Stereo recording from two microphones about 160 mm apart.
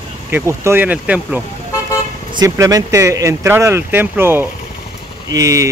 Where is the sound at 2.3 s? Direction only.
20° right (ahead or behind).